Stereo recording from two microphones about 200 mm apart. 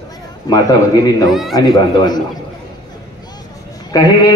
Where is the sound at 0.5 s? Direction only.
20° left (ahead or behind).